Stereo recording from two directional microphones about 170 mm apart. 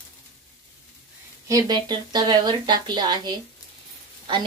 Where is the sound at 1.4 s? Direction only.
20° right (ahead or behind).